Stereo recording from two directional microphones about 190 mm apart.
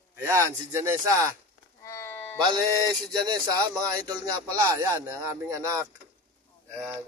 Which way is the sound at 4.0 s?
10° left (ahead or behind).